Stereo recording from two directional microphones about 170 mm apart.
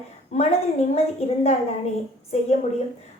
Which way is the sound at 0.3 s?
40° left (ahead or behind).